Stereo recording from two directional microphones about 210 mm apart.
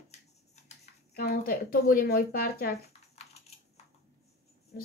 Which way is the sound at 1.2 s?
45° left (ahead or behind).